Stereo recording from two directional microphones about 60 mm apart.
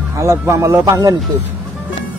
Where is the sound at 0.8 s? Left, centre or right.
Right.